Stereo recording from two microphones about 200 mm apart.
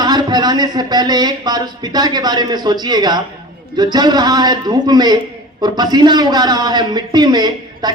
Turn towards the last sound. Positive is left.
turn(degrees=-20)  # may be behind; listen again after turning